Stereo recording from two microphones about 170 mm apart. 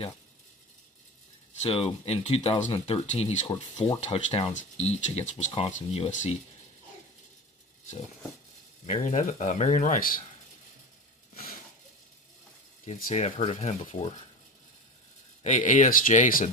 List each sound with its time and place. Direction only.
1.6 s speech: 35° left (ahead or behind)
8.9 s speech: 50° left (ahead or behind)
12.8 s speech: 50° left (ahead or behind)
15.4 s speech: 45° left (ahead or behind)